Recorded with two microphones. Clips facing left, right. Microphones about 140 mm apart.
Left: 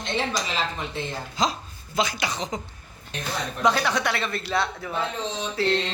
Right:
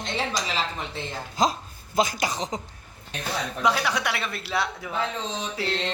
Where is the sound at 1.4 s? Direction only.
45° right (ahead or behind).